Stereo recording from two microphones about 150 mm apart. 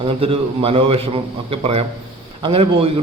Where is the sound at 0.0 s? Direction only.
40° right (ahead or behind).